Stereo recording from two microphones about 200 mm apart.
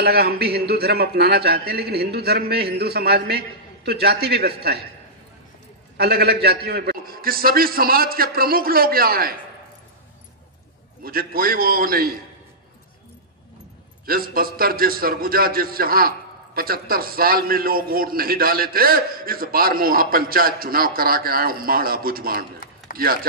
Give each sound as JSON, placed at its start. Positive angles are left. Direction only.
{"t": 0.0, "sound": "a man's voice", "side_deg": -50}
{"t": 5.9, "sound": "a man's voice", "side_deg": -50}
{"t": 11.0, "sound": "a man's voice", "side_deg": -45}
{"t": 14.0, "sound": "a man's voice", "side_deg": -45}
{"t": 22.6, "sound": "a sound", "side_deg": 45}
{"t": 23.0, "sound": "a man's voice", "side_deg": -45}